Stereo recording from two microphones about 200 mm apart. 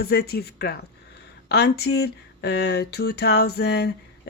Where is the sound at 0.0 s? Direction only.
50° left (ahead or behind).